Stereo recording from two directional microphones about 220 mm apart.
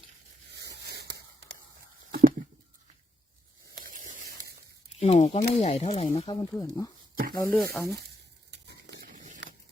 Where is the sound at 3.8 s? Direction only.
35° right (ahead or behind).